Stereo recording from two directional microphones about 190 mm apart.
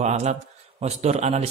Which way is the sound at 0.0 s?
35° right (ahead or behind).